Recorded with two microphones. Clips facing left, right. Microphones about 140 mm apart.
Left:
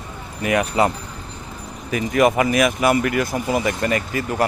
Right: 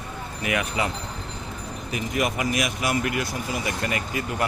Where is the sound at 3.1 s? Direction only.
50° left (ahead or behind).